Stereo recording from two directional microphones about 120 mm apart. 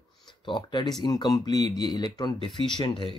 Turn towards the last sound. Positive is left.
turn(degrees=40)  # may be behind; listen again after turning